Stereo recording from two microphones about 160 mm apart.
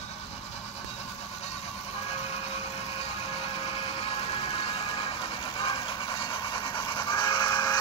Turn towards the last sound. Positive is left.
turn(degrees=25)  # may be behind; listen again after turning